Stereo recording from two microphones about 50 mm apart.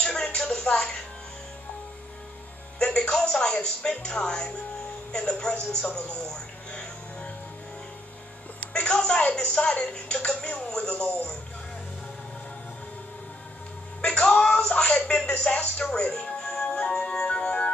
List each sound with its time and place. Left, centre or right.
0.0 s a sound: centre
0.5 s music: centre
2.8 s speech: centre
6.0 s music: centre
8.7 s speech: centre
14.0 s speech: left
16.3 s music: centre